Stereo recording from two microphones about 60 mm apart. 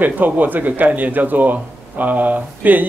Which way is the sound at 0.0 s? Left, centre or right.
Right.